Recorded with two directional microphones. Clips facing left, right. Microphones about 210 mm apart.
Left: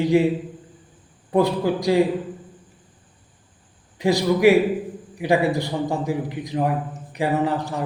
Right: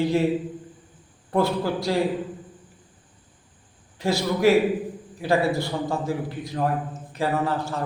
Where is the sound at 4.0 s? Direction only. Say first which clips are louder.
Left 4 dB; 15° left (ahead or behind).